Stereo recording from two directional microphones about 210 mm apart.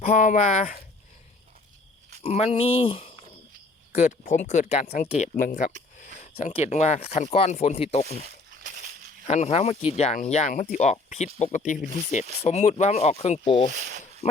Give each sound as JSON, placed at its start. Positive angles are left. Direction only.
{"t": 0.0, "sound": "speech", "side_deg": 35}
{"t": 2.2, "sound": "speech", "side_deg": 30}
{"t": 6.1, "sound": "a sound", "side_deg": 35}
{"t": 6.5, "sound": "speech", "side_deg": 30}
{"t": 8.6, "sound": "a sound", "side_deg": -35}
{"t": 9.2, "sound": "speech", "side_deg": 30}
{"t": 13.7, "sound": "speech", "side_deg": -35}